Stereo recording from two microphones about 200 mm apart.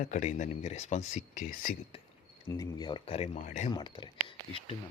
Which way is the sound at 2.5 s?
20° left (ahead or behind).